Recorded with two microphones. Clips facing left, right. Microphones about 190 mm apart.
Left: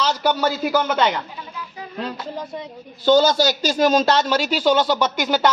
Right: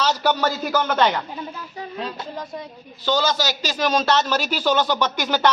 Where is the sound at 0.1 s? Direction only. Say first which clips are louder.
Left 1 dB; 10° left (ahead or behind).